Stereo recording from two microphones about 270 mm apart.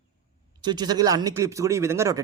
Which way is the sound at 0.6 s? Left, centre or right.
Centre.